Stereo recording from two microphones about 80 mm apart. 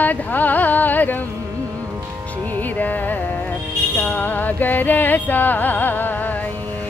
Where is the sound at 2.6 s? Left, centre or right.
Left.